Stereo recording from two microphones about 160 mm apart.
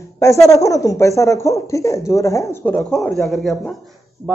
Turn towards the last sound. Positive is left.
turn(degrees=0)  # may be behind; listen again after turning